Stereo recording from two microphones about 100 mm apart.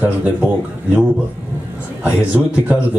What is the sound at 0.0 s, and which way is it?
Speech, 15° right (ahead or behind).